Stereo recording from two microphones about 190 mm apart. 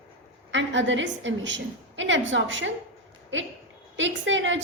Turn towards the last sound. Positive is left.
turn(degrees=-75)  # may be behind; listen again after turning